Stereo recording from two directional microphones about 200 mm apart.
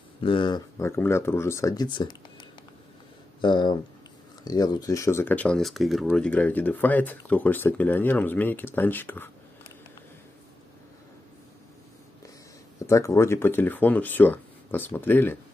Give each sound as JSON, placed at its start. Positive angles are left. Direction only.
{"t": 0.2, "sound": "speech", "side_deg": 25}
{"t": 12.7, "sound": "speech", "side_deg": 15}